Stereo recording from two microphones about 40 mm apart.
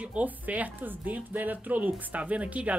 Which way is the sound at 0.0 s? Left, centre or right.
Right.